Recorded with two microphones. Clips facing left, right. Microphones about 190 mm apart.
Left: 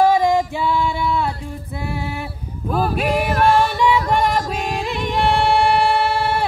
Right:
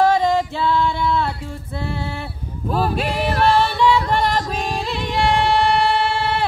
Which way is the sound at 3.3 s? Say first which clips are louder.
Even; 45° left (ahead or behind).